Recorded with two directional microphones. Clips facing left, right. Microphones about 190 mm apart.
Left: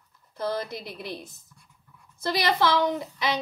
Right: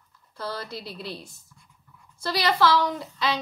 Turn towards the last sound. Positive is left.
turn(degrees=20)  # may be behind; listen again after turning